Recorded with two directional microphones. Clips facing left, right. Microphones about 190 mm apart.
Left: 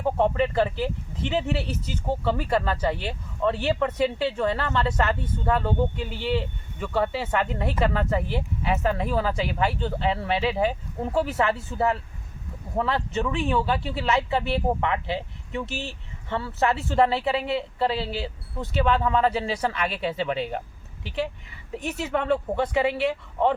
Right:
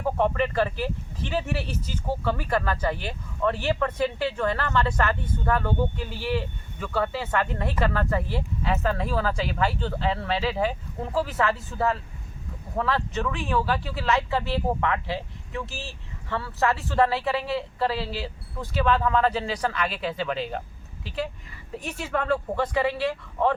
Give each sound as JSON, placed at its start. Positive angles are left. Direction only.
{"t": 0.0, "sound": "speech", "side_deg": 20}
{"t": 21.7, "sound": "speech", "side_deg": 20}